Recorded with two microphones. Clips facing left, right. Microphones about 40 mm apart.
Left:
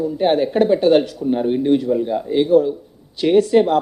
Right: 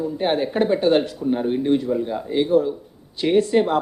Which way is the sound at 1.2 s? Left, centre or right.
Centre.